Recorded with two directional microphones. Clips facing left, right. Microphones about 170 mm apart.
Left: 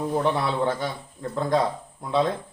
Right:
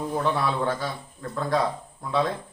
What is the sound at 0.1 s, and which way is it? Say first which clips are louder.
A man's voice: left 1 dB; 20° left (ahead or behind).